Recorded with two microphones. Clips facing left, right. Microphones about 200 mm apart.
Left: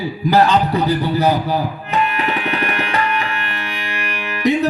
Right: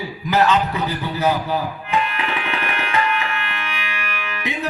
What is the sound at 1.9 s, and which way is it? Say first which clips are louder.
Tabla: left 3 dB; 40° left (ahead or behind).